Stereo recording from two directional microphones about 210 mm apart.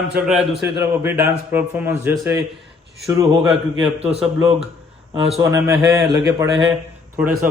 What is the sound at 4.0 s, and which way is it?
Speech, 30° right (ahead or behind).